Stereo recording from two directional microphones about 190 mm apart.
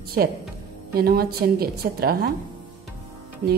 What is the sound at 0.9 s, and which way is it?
A woman's voice, 55° right (ahead or behind).